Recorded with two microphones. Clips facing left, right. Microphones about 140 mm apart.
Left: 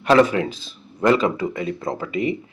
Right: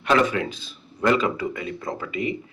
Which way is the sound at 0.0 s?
35° left (ahead or behind).